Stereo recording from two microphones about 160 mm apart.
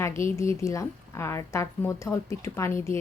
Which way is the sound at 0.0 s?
20° left (ahead or behind).